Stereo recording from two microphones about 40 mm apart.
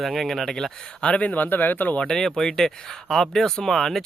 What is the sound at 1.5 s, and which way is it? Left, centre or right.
Speech, left.